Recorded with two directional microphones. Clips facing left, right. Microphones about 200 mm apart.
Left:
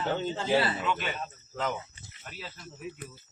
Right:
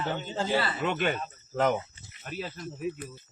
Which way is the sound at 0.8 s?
55° right (ahead or behind).